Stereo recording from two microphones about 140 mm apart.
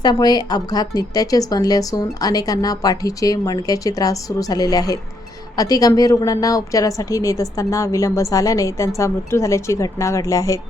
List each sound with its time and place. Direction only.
0.0 s a woman's voice: 30° left (ahead or behind)